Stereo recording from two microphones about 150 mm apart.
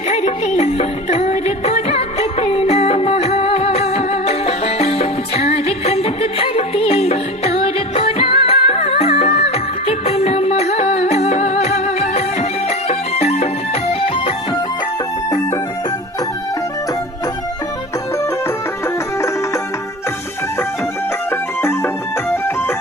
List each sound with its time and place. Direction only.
0.1 s music: 50° left (ahead or behind)
21.6 s music: 15° left (ahead or behind)